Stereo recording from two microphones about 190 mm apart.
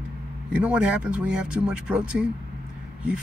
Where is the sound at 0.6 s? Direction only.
5° right (ahead or behind).